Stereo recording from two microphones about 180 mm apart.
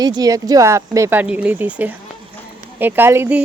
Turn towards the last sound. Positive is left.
turn(degrees=-15)  # may be behind; listen again after turning